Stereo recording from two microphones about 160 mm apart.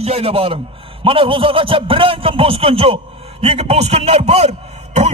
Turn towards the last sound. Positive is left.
turn(degrees=-45)  # may be behind; listen again after turning